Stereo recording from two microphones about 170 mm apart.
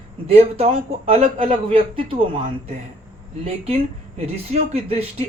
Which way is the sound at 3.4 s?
35° right (ahead or behind).